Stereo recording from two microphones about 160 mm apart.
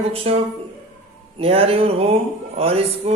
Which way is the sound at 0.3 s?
35° right (ahead or behind).